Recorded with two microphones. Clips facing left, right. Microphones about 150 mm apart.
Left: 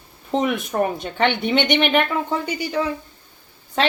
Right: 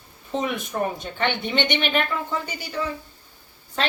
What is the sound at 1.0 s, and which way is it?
A woman's voice, 60° left (ahead or behind).